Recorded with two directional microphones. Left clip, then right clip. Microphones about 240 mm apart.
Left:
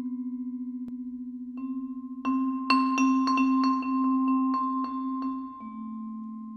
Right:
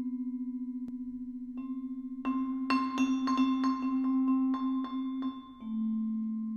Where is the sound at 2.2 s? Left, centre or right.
Left.